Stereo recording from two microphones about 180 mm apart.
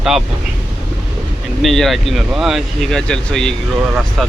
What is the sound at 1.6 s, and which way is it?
Speech, centre (ahead or behind).